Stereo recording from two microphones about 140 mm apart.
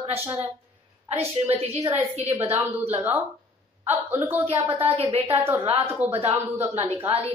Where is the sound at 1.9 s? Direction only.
50° right (ahead or behind).